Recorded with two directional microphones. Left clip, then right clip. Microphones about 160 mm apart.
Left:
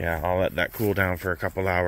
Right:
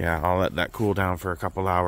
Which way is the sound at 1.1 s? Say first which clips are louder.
Left 1 dB; 10° right (ahead or behind).